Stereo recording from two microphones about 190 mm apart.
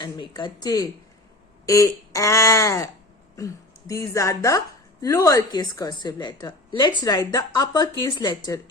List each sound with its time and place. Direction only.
0.0 s a woman's voice: 25° left (ahead or behind)